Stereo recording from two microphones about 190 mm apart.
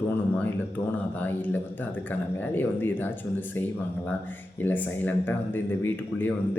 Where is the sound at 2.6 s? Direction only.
10° left (ahead or behind).